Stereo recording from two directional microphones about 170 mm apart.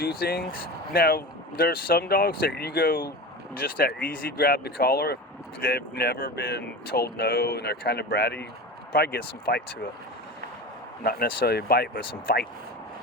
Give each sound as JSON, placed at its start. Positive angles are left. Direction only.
{"t": 0.0, "sound": "speech", "side_deg": 65}
{"t": 11.0, "sound": "speech", "side_deg": 65}